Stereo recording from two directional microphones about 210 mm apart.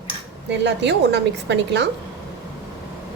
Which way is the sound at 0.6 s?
55° right (ahead or behind).